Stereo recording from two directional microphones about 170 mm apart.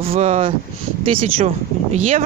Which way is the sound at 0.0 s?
40° right (ahead or behind).